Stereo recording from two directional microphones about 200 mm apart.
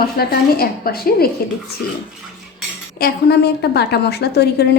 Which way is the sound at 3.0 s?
55° left (ahead or behind).